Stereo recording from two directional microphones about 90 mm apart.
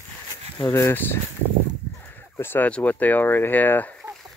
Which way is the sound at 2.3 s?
25° left (ahead or behind).